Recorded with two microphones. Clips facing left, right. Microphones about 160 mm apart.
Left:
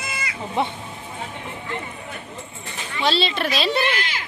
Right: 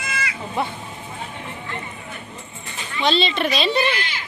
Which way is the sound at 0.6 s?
25° left (ahead or behind).